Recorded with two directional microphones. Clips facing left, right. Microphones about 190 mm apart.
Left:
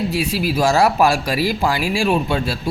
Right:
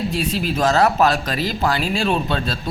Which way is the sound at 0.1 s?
10° left (ahead or behind).